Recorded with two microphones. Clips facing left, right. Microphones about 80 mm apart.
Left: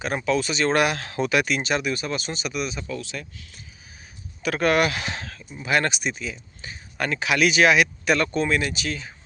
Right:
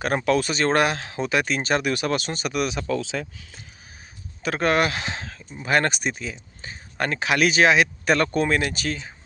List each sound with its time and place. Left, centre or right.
0.3 s speech: right
0.9 s speech: right
1.9 s speech: right
4.4 s speech: right
5.5 s speech: right